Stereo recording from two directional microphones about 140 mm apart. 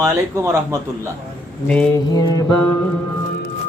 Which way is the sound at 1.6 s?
10° left (ahead or behind).